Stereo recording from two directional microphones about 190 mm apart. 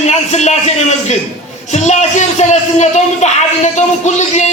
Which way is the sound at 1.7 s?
40° left (ahead or behind).